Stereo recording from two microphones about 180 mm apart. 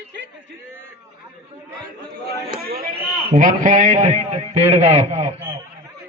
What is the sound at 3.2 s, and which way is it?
A man's voice, 45° right (ahead or behind).